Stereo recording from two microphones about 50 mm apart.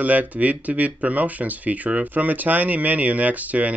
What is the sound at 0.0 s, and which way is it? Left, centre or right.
Speech, right.